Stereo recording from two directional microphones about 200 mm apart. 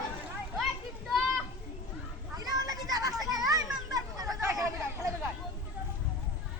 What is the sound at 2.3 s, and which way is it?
Children playing, 20° right (ahead or behind).